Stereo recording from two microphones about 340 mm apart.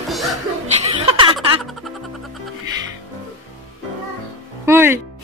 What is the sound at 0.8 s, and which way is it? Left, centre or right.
Chuckle, centre.